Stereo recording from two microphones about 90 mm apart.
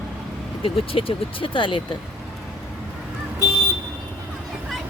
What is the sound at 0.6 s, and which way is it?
Speech, 90° left.